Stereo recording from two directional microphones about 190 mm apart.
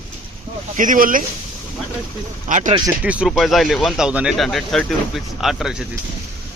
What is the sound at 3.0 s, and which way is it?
Speech, 5° right (ahead or behind).